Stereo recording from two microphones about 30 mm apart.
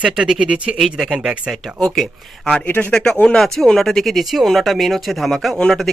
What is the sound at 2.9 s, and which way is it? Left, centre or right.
Speech, left.